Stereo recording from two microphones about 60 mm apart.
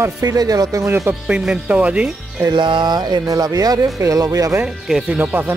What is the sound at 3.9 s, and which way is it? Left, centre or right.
Speech, right.